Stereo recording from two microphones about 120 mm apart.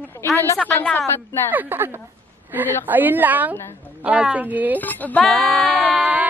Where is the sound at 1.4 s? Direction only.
15° right (ahead or behind).